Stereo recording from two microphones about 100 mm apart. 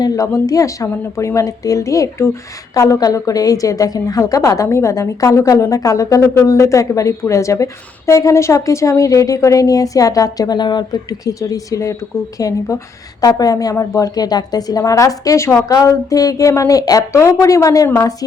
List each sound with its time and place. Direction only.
0.0 s a woman's voice: 35° left (ahead or behind)